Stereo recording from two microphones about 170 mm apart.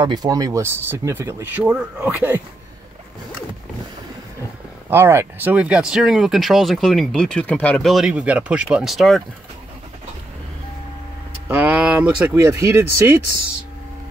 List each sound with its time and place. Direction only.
0.0 s speech: 25° right (ahead or behind)
4.8 s speech: 15° right (ahead or behind)
11.4 s a sound: 10° right (ahead or behind)
12.4 s speech: 20° right (ahead or behind)